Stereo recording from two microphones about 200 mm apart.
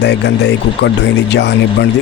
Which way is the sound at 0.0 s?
60° left (ahead or behind).